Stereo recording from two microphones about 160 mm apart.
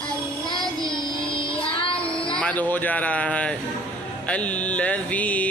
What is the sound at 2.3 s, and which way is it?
Music, 10° left (ahead or behind).